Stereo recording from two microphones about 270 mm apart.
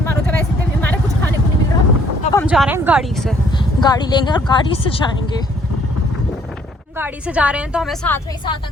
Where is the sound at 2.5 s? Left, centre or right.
Centre.